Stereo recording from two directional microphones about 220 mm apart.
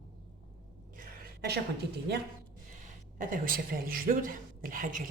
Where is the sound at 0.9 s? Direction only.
45° right (ahead or behind).